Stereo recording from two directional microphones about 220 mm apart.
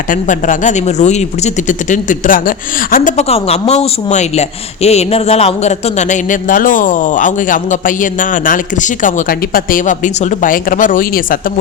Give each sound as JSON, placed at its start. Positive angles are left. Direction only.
{"t": 0.1, "sound": "speech", "side_deg": 35}